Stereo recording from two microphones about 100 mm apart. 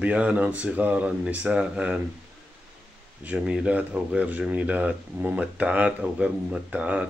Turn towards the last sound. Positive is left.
turn(degrees=-15)  # may be behind; listen again after turning